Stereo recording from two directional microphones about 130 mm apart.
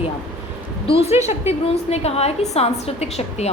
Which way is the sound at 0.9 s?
45° left (ahead or behind).